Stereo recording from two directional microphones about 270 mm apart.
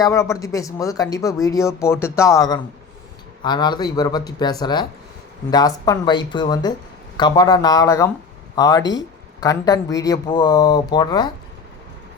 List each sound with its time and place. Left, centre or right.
0.0 s speech: centre